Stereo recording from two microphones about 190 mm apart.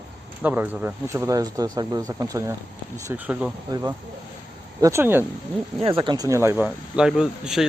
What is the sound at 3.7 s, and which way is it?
Speech, 20° right (ahead or behind).